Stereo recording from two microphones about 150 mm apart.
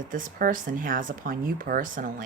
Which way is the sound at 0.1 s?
65° right (ahead or behind).